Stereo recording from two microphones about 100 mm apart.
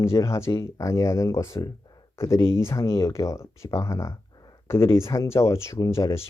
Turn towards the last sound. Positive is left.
turn(degrees=30)  # may be behind; listen again after turning